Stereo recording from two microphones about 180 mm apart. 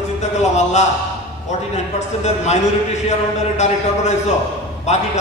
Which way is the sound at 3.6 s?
40° left (ahead or behind).